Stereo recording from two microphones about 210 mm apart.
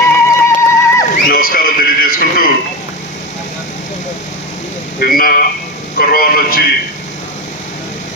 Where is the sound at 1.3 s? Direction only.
45° left (ahead or behind).